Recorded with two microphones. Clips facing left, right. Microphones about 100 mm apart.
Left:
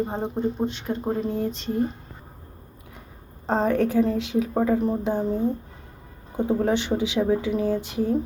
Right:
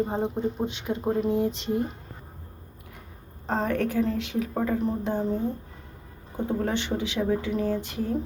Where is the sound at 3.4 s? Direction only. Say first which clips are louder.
Left 4 dB; 25° left (ahead or behind).